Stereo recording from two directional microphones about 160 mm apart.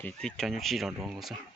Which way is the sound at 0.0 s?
5° left (ahead or behind).